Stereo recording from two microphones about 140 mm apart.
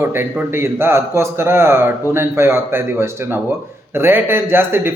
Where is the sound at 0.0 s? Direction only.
15° right (ahead or behind).